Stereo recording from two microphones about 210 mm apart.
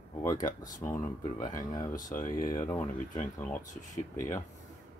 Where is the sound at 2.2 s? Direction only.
40° left (ahead or behind).